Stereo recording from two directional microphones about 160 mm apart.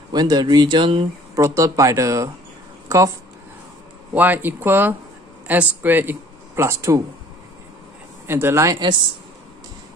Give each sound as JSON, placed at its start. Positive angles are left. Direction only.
{"t": 0.1, "sound": "speech", "side_deg": -25}
{"t": 1.3, "sound": "speech", "side_deg": -20}
{"t": 4.1, "sound": "speech", "side_deg": -10}
{"t": 8.3, "sound": "speech", "side_deg": -15}